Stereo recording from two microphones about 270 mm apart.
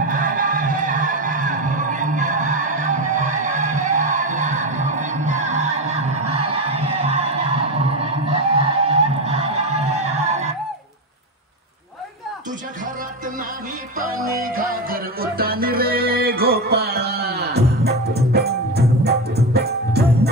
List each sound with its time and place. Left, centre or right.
0.0 s music: right
6.3 s a sound: left
6.7 s music: right
7.8 s a sound: right
9.8 s music: right
14.6 s music: right